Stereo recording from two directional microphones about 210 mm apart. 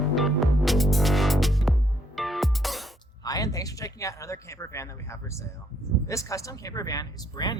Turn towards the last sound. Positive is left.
turn(degrees=20)  # may be behind; listen again after turning